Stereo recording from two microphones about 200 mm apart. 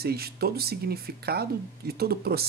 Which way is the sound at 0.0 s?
50° right (ahead or behind).